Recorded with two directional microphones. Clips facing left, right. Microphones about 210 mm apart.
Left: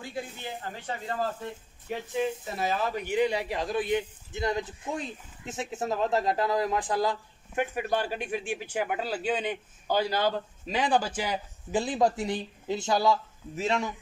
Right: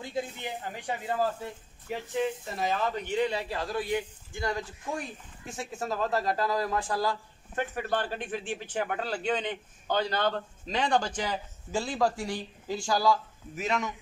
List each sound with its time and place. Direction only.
0.0 s speech: 20° right (ahead or behind)
1.9 s speech: 5° left (ahead or behind)
11.7 s speech: 20° left (ahead or behind)